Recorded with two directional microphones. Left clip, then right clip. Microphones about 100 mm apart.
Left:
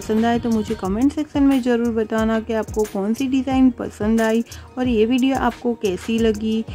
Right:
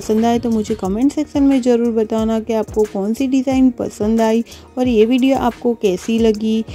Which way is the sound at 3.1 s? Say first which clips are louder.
Right 4 dB; 30° right (ahead or behind).